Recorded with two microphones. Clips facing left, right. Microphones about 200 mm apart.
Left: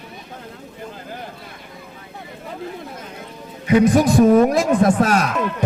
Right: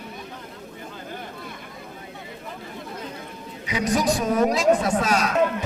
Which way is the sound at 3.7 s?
55° left (ahead or behind).